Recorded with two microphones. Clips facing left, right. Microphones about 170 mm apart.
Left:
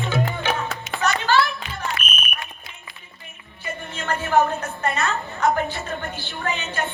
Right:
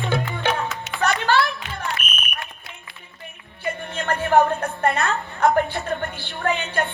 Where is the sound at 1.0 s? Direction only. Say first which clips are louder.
Even; 60° right (ahead or behind).